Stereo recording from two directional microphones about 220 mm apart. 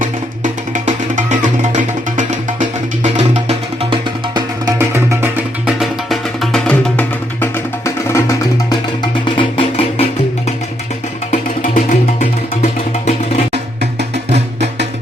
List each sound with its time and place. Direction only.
0.0 s music: 35° right (ahead or behind)
4.4 s music: 15° right (ahead or behind); by 10.1 s 25° left (ahead or behind)
11.3 s music: 40° left (ahead or behind)
14.3 s music: 30° right (ahead or behind)